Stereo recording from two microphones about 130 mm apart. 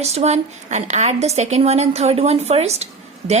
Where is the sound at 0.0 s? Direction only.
55° right (ahead or behind).